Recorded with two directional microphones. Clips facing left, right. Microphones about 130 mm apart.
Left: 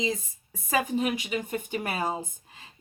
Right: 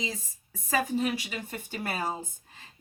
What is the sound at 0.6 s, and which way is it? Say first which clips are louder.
Speech: left 1 dB; 15° left (ahead or behind).